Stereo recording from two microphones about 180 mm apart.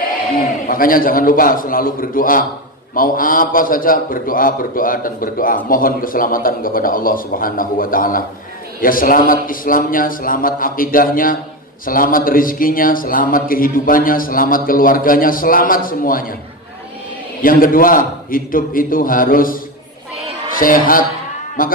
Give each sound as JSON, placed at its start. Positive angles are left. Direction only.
{"t": 0.7, "sound": "a man's voice", "side_deg": 50}
{"t": 17.4, "sound": "a man's voice", "side_deg": 50}